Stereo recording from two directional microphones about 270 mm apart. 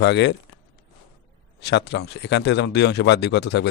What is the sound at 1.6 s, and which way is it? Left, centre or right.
Speech, left.